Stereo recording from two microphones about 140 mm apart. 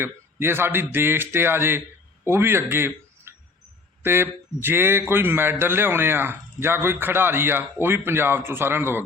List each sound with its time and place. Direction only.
0.0 s a man's voice: 15° right (ahead or behind)